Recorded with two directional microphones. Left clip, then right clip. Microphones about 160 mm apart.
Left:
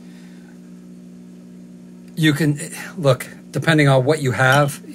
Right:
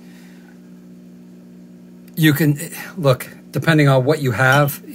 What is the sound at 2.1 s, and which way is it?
Speech, 45° right (ahead or behind).